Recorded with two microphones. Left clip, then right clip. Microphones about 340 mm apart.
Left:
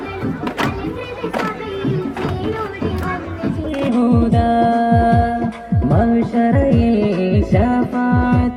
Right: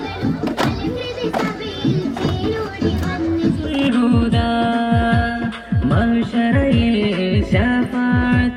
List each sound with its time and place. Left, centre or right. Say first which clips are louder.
3.9 s music: left 2 dB; left
6.0 s music: left 4 dB; left
6.8 s music: left 2 dB; left